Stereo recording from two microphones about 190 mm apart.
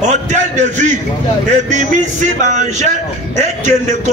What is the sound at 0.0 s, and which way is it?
A man's voice, 40° right (ahead or behind).